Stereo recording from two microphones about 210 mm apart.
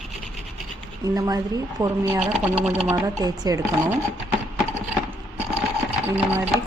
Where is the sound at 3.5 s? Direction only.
15° right (ahead or behind).